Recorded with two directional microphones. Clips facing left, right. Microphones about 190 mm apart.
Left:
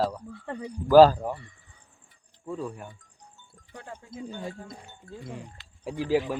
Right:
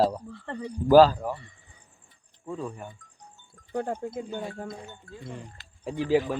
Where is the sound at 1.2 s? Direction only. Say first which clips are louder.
Even; 25° left (ahead or behind).